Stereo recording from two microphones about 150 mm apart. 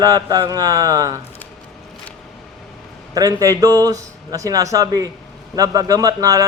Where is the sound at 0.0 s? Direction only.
25° right (ahead or behind).